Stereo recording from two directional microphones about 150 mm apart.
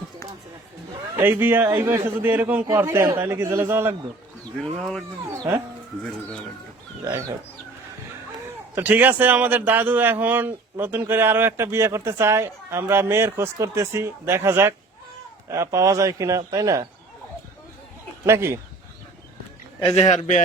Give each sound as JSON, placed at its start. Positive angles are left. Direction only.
{"t": 1.1, "sound": "a man's voice", "side_deg": -15}
{"t": 4.8, "sound": "speech", "side_deg": 0}
{"t": 7.0, "sound": "speech", "side_deg": -20}
{"t": 8.7, "sound": "a man's voice", "side_deg": -10}
{"t": 18.3, "sound": "a man's voice", "side_deg": -15}
{"t": 20.0, "sound": "a man's voice", "side_deg": 50}